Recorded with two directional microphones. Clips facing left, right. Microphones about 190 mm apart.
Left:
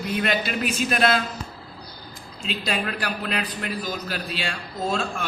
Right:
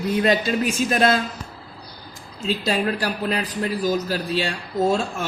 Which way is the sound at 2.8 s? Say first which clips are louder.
Right 5 dB; 35° right (ahead or behind).